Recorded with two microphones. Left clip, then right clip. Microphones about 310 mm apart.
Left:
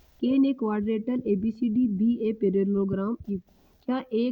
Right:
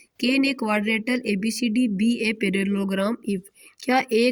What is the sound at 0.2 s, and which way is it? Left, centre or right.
Speech, left.